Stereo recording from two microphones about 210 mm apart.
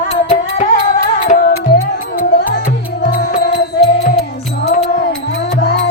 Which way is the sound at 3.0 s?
50° left (ahead or behind).